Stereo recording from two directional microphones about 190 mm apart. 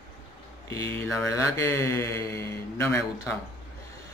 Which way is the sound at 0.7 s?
15° left (ahead or behind).